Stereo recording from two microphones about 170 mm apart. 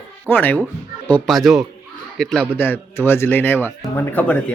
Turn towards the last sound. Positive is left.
turn(degrees=10)  # may be behind; listen again after turning